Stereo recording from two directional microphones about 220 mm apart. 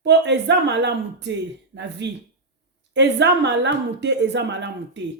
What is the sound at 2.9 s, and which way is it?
A woman's voice, 50° right (ahead or behind).